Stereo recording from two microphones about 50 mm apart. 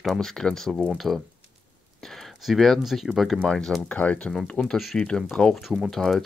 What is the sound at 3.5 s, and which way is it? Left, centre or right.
Speech, centre.